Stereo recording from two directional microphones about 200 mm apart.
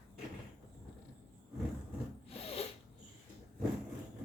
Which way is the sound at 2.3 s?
30° left (ahead or behind).